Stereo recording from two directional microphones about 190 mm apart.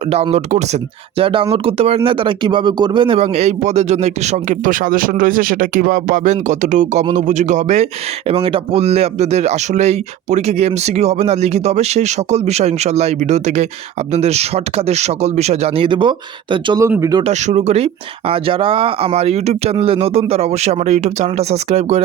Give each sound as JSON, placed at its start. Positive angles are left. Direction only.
{"t": 0.1, "sound": "speech", "side_deg": -35}
{"t": 17.2, "sound": "speech", "side_deg": -35}